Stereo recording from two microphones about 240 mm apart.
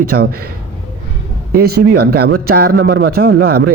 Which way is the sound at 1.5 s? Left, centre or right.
Right.